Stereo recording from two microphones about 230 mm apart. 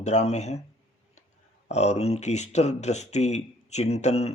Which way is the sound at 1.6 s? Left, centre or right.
Left.